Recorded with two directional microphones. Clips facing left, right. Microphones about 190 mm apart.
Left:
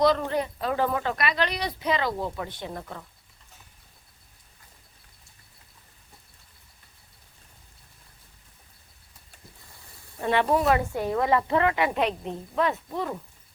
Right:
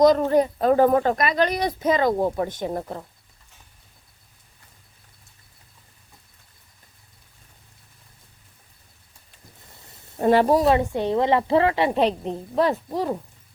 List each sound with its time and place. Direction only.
0.0 s a woman's voice: 45° right (ahead or behind)
10.2 s a woman's voice: 40° right (ahead or behind)